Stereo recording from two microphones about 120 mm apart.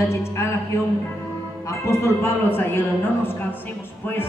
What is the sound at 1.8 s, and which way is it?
A woman's voice, 25° left (ahead or behind).